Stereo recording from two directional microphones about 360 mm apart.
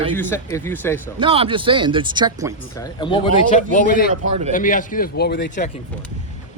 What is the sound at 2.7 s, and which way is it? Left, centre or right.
A man's voice, centre.